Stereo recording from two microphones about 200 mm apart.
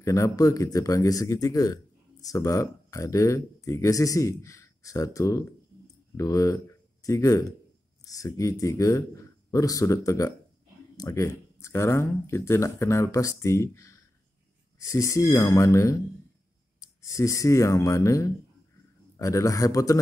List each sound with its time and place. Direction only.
0.0 s speech: 15° left (ahead or behind)